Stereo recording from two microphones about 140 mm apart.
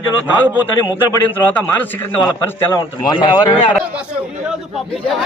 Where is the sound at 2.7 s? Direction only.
30° left (ahead or behind).